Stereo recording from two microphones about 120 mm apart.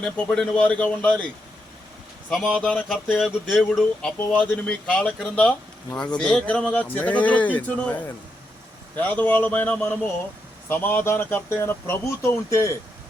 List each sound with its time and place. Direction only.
0.0 s speech: 5° left (ahead or behind)
2.3 s speech: 5° left (ahead or behind); by 12.7 s 25° left (ahead or behind)